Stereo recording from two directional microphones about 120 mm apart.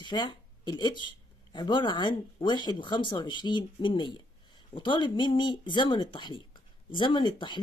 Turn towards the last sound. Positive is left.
turn(degrees=40)  # may be behind; listen again after turning